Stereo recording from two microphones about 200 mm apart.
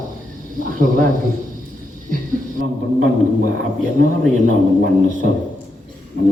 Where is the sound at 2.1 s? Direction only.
45° right (ahead or behind).